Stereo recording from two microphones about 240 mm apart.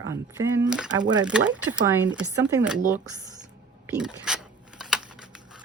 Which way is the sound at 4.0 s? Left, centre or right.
Centre.